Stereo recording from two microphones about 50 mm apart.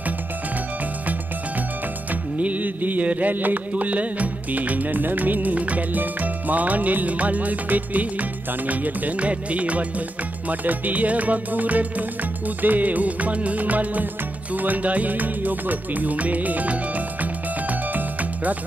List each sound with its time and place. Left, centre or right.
2.4 s music: right